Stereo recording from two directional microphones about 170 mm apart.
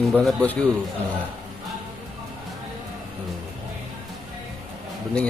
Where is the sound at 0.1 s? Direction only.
Centre (ahead or behind).